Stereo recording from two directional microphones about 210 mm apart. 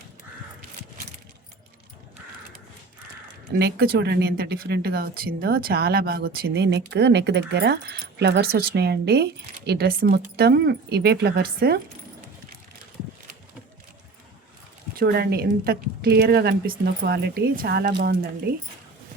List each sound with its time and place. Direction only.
3.6 s speech: 50° right (ahead or behind)
14.9 s speech: 50° right (ahead or behind)